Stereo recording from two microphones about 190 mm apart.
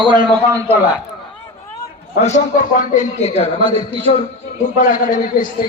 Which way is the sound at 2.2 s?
40° left (ahead or behind).